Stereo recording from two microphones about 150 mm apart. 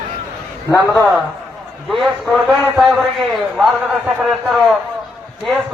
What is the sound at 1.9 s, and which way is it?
A man's voice, centre (ahead or behind).